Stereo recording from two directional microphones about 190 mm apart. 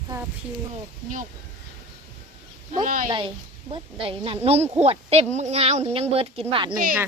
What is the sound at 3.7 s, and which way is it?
A woman's voice, 30° right (ahead or behind).